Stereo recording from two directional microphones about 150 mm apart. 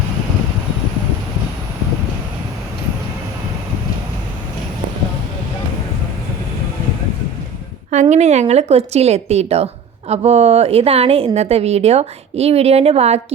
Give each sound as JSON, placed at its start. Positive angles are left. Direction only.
{"t": 8.1, "sound": "a woman's voice", "side_deg": -50}